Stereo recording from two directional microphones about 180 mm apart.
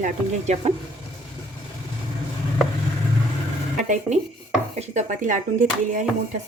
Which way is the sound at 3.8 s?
40° right (ahead or behind).